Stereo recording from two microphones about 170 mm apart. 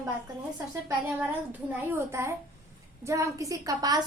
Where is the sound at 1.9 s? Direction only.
15° right (ahead or behind).